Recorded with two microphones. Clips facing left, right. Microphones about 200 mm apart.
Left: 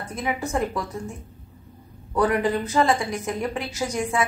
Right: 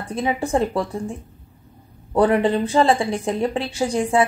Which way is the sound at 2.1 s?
30° right (ahead or behind).